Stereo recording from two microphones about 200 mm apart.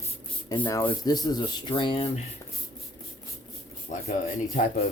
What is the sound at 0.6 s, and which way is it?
Speech, 10° left (ahead or behind).